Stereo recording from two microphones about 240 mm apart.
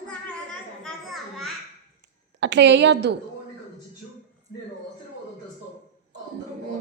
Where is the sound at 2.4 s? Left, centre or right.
Right.